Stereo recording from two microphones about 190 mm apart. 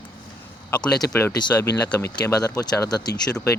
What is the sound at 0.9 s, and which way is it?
Speech, 20° left (ahead or behind).